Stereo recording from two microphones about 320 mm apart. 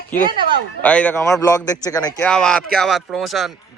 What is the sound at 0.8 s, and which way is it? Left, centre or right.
A man's voice, centre.